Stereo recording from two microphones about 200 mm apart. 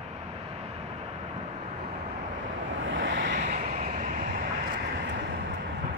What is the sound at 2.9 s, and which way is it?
Vehicle, 65° right (ahead or behind).